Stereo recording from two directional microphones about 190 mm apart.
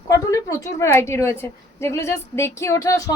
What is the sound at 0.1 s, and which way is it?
A woman's voice, 15° left (ahead or behind).